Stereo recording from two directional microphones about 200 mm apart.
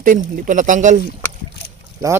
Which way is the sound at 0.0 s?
40° right (ahead or behind).